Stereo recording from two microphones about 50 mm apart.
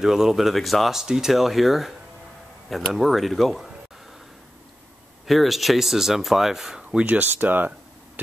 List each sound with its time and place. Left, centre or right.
0.0 s speech: centre
5.2 s speech: centre
7.1 s speech: right